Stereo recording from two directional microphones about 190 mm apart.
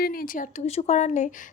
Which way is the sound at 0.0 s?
50° left (ahead or behind).